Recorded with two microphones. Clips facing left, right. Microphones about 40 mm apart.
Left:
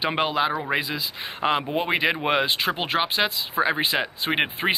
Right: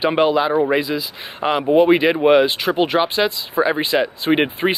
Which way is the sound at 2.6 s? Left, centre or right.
Centre.